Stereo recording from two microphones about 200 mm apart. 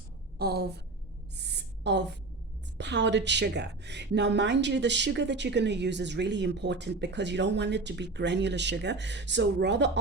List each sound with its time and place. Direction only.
0.3 s a woman's voice: 50° right (ahead or behind)
1.4 s gasp: 60° right (ahead or behind)
2.7 s a woman's voice: 60° right (ahead or behind)